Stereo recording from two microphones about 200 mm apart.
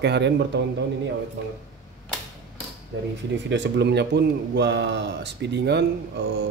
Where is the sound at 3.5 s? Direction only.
60° right (ahead or behind).